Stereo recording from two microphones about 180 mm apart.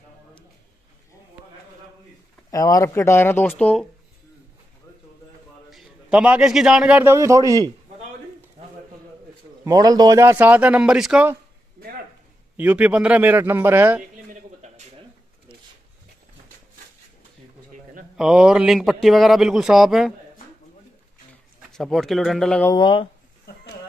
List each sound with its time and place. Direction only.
2.5 s speech: 20° left (ahead or behind)
5.7 s a man's voice: 5° right (ahead or behind); by 7.7 s 20° right (ahead or behind)
9.7 s a man's voice: 20° right (ahead or behind); by 11.3 s 5° right (ahead or behind)
12.5 s a man's voice: 10° right (ahead or behind)
18.1 s speech: 5° right (ahead or behind)
21.7 s speech: centre (ahead or behind)
22.7 s speech: 25° left (ahead or behind)